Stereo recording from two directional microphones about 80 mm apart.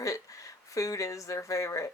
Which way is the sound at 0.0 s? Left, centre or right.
Left.